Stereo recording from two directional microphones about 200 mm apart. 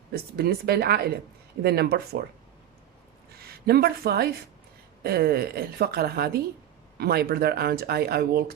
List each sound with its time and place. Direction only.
0.1 s speech: 50° right (ahead or behind)
3.3 s speech: 50° right (ahead or behind)